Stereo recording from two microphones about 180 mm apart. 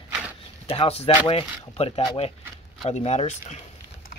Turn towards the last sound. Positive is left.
turn(degrees=40)  # may be behind; listen again after turning